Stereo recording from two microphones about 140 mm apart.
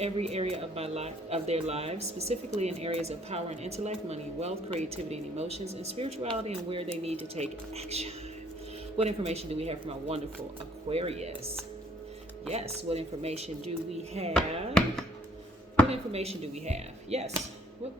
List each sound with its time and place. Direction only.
0.0 s speech: 50° right (ahead or behind)
12.5 s speech: 45° right (ahead or behind)
14.7 s chopping: 5° left (ahead or behind)
15.9 s speech: 45° right (ahead or behind)